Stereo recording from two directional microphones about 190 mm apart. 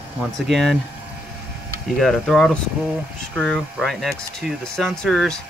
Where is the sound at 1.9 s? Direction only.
Centre (ahead or behind).